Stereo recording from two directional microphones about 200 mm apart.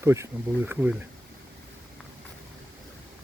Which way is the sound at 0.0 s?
15° right (ahead or behind).